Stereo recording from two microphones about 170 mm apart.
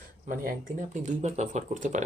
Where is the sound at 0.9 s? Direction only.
40° right (ahead or behind).